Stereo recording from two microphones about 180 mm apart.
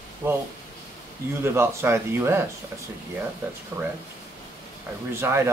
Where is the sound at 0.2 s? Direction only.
15° right (ahead or behind).